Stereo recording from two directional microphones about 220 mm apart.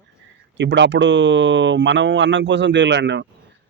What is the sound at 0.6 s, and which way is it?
Speech, 55° right (ahead or behind).